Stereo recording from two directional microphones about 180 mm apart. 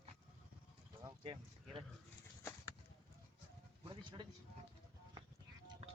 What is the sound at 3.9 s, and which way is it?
Speech, 25° right (ahead or behind).